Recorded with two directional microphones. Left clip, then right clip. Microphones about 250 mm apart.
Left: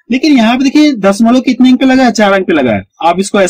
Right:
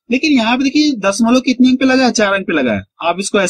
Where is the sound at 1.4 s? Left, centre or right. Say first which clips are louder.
Left 4 dB; left.